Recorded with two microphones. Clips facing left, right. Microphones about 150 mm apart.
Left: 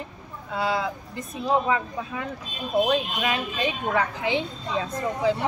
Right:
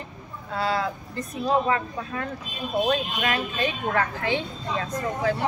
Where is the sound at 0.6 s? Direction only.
15° left (ahead or behind).